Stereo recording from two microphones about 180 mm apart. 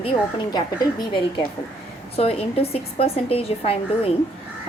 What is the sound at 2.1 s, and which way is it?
A woman's voice, 35° left (ahead or behind).